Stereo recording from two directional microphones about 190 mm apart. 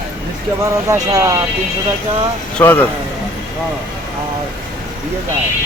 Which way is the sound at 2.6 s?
10° left (ahead or behind).